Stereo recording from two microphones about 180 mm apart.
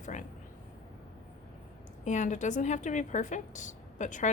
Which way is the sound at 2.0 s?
40° left (ahead or behind).